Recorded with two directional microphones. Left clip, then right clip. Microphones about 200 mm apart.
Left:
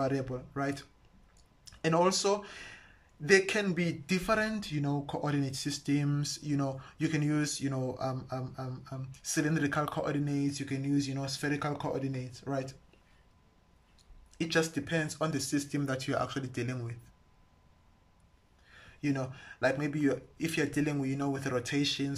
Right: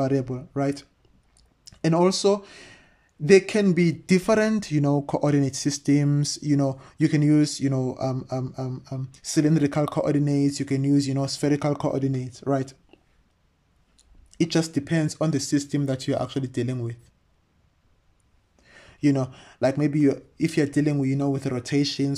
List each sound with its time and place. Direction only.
0.0 s speech: 25° right (ahead or behind)
13.9 s speech: 30° right (ahead or behind)
18.7 s speech: 35° right (ahead or behind)